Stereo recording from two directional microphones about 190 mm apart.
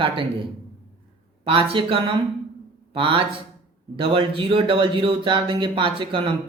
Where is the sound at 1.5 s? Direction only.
30° right (ahead or behind).